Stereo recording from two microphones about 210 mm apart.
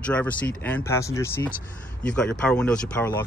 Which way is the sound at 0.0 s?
5° left (ahead or behind).